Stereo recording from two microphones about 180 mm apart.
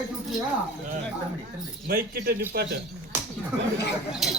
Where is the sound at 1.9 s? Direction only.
55° right (ahead or behind).